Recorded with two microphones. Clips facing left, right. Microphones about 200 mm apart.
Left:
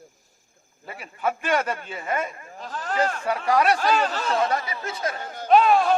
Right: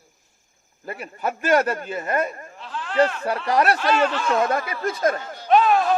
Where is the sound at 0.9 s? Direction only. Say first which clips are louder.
Even; 40° right (ahead or behind).